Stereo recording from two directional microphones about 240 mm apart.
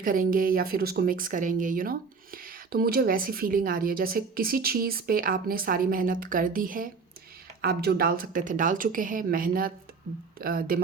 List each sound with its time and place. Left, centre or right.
0.0 s speech: right